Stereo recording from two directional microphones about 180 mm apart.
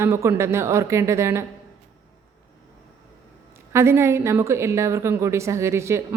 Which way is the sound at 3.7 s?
15° right (ahead or behind).